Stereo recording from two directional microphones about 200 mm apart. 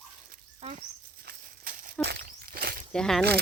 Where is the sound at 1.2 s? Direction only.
45° right (ahead or behind).